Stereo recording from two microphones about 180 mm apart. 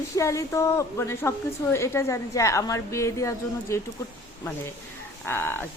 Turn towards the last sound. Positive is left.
turn(degrees=10)  # may be behind; listen again after turning